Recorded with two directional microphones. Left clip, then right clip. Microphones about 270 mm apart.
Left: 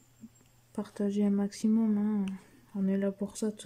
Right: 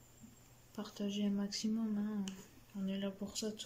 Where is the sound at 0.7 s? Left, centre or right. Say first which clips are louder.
Left 9 dB; left.